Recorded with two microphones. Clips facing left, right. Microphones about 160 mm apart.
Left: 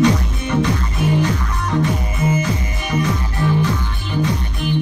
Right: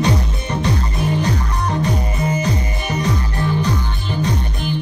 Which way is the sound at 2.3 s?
35° right (ahead or behind).